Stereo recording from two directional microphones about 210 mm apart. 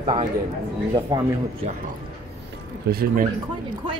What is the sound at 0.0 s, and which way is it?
Speech, 25° right (ahead or behind).